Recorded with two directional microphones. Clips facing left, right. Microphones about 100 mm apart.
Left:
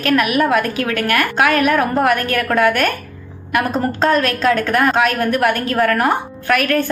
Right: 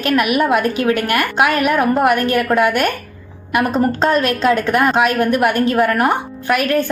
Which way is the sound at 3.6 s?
Centre (ahead or behind).